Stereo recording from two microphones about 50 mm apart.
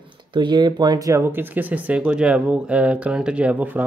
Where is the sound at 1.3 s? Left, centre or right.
Right.